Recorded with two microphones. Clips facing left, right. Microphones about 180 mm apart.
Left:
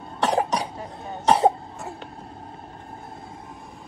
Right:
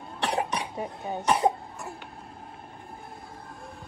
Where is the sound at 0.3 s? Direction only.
35° left (ahead or behind).